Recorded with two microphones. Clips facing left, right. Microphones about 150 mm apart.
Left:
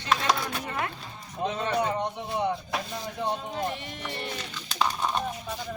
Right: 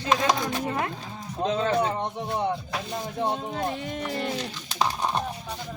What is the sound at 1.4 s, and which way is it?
Speech, 90° right.